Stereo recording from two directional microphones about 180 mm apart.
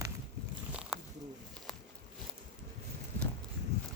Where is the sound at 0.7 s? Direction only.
5° right (ahead or behind).